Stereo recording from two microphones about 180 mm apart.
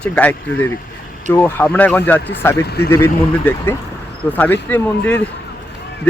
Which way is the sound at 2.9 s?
15° left (ahead or behind).